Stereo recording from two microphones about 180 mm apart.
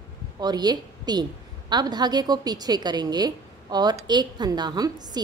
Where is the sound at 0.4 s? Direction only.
25° right (ahead or behind).